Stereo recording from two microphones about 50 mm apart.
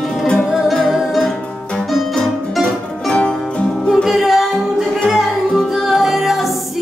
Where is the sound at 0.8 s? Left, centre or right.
Centre.